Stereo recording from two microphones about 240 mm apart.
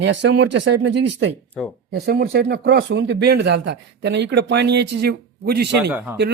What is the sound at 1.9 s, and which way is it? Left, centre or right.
Speech, right.